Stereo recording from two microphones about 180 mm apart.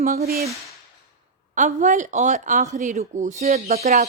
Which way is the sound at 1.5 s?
45° right (ahead or behind).